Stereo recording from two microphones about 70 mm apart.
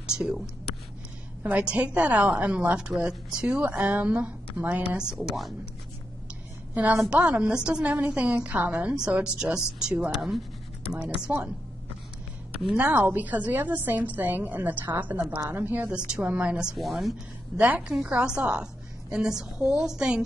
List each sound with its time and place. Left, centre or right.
0.0 s speech: centre
1.4 s a woman's voice: right; by 5.5 s centre
6.7 s a woman's voice: right
12.7 s a woman's voice: right
16.0 s a woman's voice: centre
16.7 s a woman's voice: centre
17.6 s a woman's voice: centre